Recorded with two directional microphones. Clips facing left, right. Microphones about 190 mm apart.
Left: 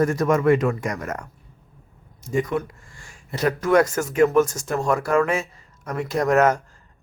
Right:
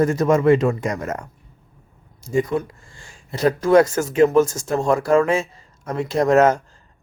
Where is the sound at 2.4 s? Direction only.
25° right (ahead or behind).